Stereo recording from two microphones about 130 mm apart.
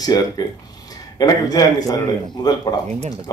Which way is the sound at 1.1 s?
30° left (ahead or behind).